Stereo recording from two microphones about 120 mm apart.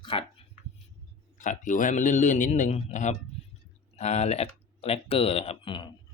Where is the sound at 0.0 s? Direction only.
50° left (ahead or behind).